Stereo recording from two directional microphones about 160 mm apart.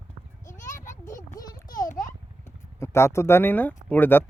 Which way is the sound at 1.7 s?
55° left (ahead or behind).